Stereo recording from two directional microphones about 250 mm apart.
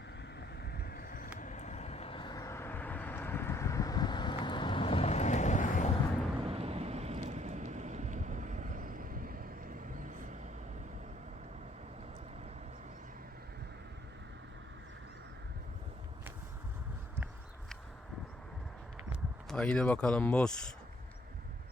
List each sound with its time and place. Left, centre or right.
0.3 s vehicle: left
6.4 s thunder: right
19.5 s speech: centre